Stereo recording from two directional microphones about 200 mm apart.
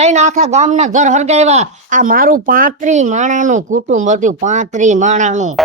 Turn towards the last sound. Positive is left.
turn(degrees=-35)  # may be behind; listen again after turning